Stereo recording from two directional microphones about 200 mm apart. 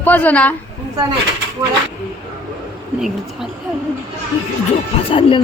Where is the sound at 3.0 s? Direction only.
Centre (ahead or behind).